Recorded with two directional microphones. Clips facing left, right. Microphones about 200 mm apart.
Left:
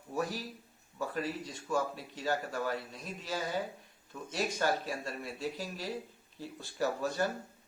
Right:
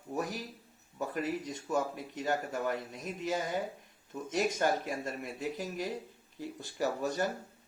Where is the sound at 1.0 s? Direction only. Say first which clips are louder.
Right 2 dB; 20° right (ahead or behind).